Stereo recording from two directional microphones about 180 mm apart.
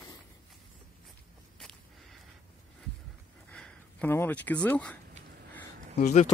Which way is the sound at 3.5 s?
5° left (ahead or behind).